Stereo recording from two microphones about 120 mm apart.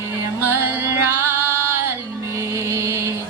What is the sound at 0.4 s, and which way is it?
Music, 20° right (ahead or behind).